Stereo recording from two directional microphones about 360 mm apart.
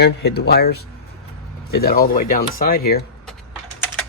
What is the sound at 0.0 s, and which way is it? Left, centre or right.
Speech, left.